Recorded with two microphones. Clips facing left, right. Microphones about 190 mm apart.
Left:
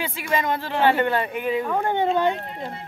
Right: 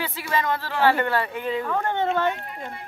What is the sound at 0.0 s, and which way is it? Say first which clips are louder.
Speech: left 1 dB; 20° left (ahead or behind).